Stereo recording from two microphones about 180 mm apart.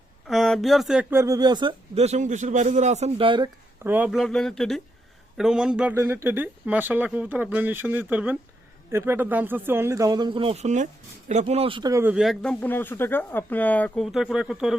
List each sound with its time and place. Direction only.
0.3 s speech: centre (ahead or behind)
1.1 s speech: 15° right (ahead or behind)
2.0 s a man's voice: 40° right (ahead or behind)
3.8 s a man's voice: 10° right (ahead or behind)
12.1 s speech: centre (ahead or behind)